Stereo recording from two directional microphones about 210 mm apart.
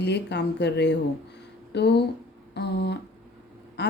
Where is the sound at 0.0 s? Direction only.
55° left (ahead or behind).